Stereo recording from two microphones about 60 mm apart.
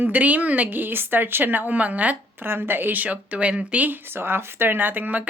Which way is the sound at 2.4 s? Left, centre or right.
Right.